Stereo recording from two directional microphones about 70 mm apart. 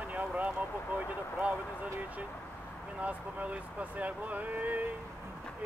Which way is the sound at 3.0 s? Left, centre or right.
Centre.